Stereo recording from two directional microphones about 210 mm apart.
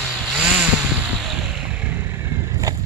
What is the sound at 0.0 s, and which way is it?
Chainsaw, 5° right (ahead or behind).